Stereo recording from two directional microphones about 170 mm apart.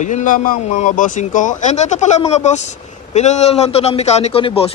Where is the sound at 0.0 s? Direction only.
45° left (ahead or behind).